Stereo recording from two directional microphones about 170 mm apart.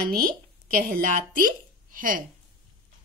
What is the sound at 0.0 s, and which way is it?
Speech, 55° right (ahead or behind).